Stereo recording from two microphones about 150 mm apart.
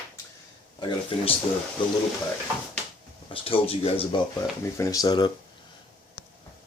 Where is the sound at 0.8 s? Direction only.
30° left (ahead or behind).